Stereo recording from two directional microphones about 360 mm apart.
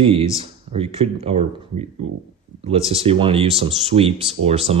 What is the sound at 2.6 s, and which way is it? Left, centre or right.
Speech, centre.